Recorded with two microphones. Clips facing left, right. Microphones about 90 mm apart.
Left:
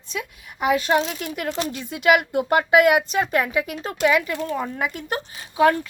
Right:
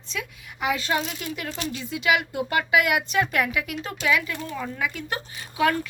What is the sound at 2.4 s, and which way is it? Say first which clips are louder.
A woman's voice: left 6 dB; 40° left (ahead or behind).